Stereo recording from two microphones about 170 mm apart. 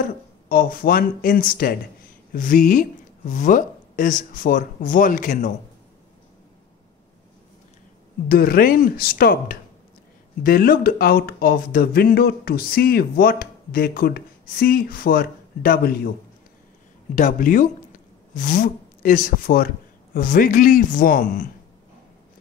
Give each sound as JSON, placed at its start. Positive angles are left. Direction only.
{"t": 0.0, "sound": "speech", "side_deg": 55}
{"t": 8.3, "sound": "speech", "side_deg": 60}
{"t": 17.1, "sound": "speech", "side_deg": 50}